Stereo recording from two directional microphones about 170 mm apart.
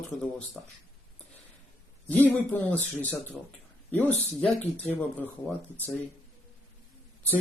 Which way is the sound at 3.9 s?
10° left (ahead or behind).